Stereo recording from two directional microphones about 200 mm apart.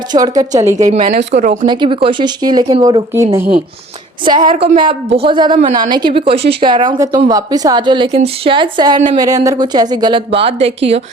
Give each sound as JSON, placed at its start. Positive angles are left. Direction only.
{"t": 0.1, "sound": "a woman's voice", "side_deg": -20}
{"t": 0.9, "sound": "a woman's voice", "side_deg": -30}
{"t": 1.6, "sound": "speech", "side_deg": -25}